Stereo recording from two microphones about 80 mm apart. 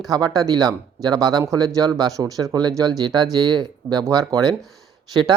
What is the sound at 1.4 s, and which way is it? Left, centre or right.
Speech, right.